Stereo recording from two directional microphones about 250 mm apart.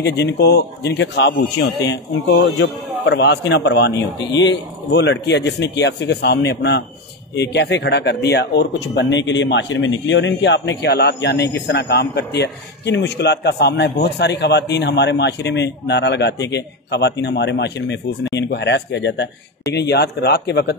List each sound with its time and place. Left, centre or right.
0.0 s a man's voice: left